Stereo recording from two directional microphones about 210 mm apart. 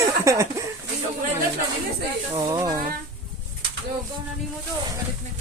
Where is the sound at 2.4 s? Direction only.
20° right (ahead or behind).